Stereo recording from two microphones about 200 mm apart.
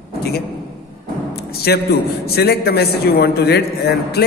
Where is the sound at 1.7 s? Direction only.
55° left (ahead or behind).